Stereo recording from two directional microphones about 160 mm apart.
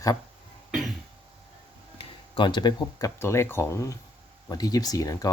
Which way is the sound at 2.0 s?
30° left (ahead or behind).